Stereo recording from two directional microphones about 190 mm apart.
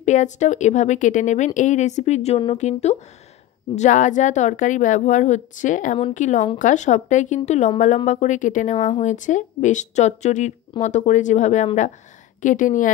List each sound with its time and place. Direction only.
0.0 s a woman's voice: 40° left (ahead or behind)